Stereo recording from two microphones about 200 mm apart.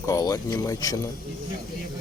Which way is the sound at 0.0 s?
15° left (ahead or behind).